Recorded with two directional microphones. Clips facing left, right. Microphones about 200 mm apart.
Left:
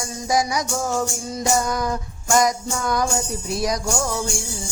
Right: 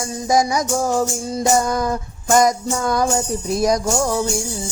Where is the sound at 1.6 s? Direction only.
50° right (ahead or behind).